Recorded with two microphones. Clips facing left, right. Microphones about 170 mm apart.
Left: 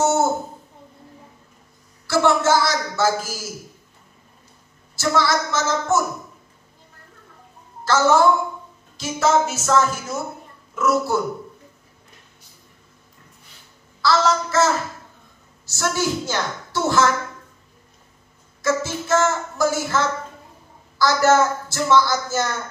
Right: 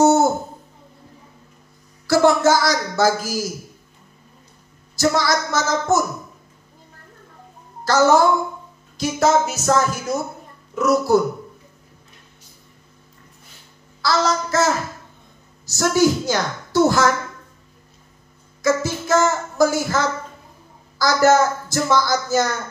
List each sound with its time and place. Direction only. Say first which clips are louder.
0.0 s a sound: right 5 dB; 40° right (ahead or behind)
2.0 s a sound: right 3 dB; 40° right (ahead or behind)
4.9 s a woman's voice: right 1 dB; 40° right (ahead or behind)
7.8 s a woman's voice: right 1 dB; 40° right (ahead or behind)
14.0 s a woman's voice: left 1 dB; 40° right (ahead or behind)
15.7 s a woman's voice: right 6 dB; 40° right (ahead or behind)
18.6 s child singing: right 3 dB; 40° right (ahead or behind)
21.0 s a woman's voice: right 1 dB; 40° right (ahead or behind)